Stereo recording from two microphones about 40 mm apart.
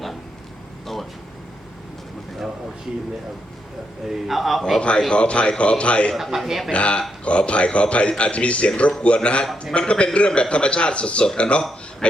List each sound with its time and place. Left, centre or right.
4.0 s a man's voice: centre
4.8 s a man's voice: left
6.1 s a man's voice: centre
6.7 s a man's voice: left